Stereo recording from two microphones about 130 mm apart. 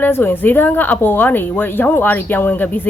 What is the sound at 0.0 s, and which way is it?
A woman's voice, 15° left (ahead or behind).